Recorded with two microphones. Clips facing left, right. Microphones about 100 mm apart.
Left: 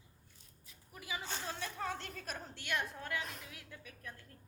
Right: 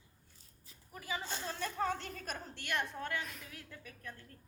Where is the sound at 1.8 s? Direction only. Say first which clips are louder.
Right 4 dB; centre (ahead or behind).